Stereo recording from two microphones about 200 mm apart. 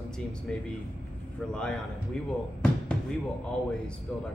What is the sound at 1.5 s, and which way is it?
Speech, 5° left (ahead or behind).